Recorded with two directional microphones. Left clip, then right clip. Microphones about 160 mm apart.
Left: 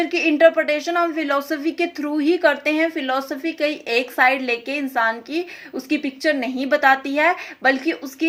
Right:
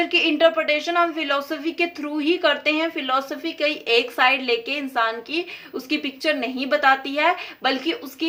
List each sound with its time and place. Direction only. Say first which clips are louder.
0.0 s a woman's voice: left 2 dB; 20° left (ahead or behind)